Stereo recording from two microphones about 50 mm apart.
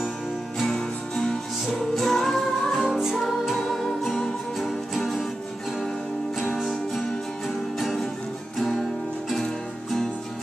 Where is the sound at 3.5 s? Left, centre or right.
Centre.